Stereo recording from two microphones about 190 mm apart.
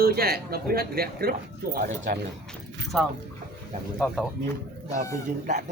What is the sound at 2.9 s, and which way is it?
Speech, centre (ahead or behind).